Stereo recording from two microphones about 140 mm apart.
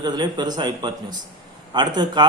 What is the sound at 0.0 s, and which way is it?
Speech, 30° right (ahead or behind).